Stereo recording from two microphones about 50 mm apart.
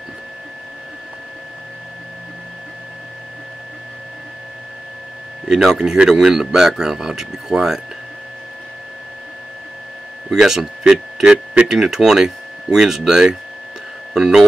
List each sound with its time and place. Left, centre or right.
5.5 s speech: centre
10.3 s speech: centre